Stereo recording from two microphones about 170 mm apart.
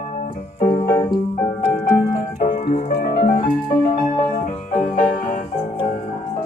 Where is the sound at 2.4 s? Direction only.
45° left (ahead or behind).